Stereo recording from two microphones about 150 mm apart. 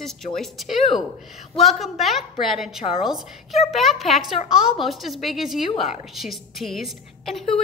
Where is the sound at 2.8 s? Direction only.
40° left (ahead or behind).